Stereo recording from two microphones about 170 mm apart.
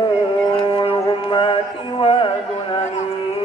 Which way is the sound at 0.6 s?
30° left (ahead or behind).